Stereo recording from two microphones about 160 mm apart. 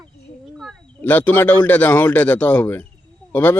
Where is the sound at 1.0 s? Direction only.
10° left (ahead or behind).